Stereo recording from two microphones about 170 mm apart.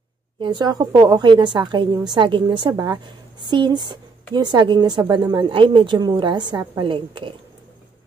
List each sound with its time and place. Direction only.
0.4 s a woman's voice: 30° right (ahead or behind)